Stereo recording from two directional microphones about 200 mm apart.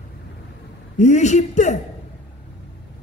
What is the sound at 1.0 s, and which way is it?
Speech, 35° left (ahead or behind).